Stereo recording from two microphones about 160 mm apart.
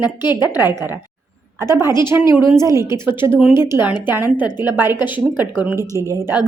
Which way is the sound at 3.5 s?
15° right (ahead or behind).